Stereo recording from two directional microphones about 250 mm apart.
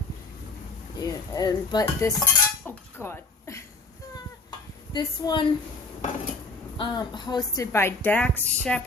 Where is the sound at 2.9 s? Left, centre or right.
Centre.